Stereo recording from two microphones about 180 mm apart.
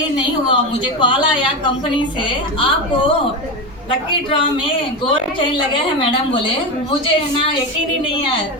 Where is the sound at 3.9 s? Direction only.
30° left (ahead or behind).